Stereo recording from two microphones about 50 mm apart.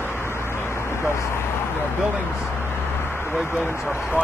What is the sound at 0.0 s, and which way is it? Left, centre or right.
Vehicle, left.